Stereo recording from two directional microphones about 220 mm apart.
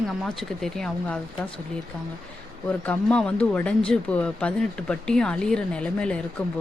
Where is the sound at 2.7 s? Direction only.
5° left (ahead or behind).